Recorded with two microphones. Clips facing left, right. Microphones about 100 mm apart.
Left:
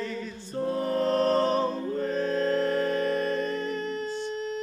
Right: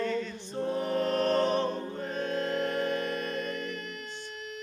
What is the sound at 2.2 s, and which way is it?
Music, 35° left (ahead or behind).